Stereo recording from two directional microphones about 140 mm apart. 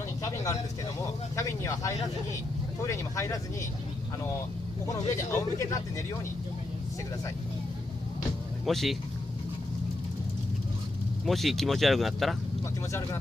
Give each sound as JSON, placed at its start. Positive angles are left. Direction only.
{"t": 0.2, "sound": "vehicle", "side_deg": 25}
{"t": 1.3, "sound": "speech", "side_deg": 20}
{"t": 4.8, "sound": "speech", "side_deg": 20}
{"t": 8.6, "sound": "speech", "side_deg": 0}
{"t": 11.2, "sound": "speech", "side_deg": 0}